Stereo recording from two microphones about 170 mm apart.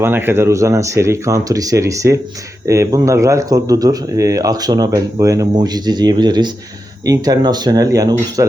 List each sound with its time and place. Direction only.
0.0 s speech: 10° right (ahead or behind)